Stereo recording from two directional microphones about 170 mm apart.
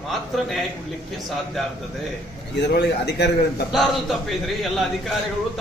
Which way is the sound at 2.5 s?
80° left.